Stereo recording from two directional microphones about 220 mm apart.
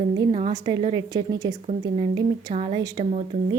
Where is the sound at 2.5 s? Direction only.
30° right (ahead or behind).